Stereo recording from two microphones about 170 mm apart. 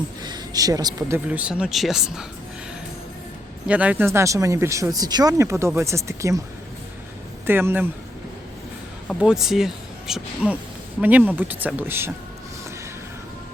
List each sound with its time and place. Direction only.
0.2 s speech: 25° right (ahead or behind); by 2.2 s 5° right (ahead or behind)
3.7 s speech: 10° right (ahead or behind)
7.4 s speech: 15° right (ahead or behind)
9.0 s speech: 5° right (ahead or behind)